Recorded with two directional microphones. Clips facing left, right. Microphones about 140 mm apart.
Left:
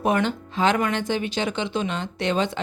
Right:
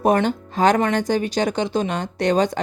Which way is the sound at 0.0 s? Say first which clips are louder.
Right 4 dB; 40° right (ahead or behind).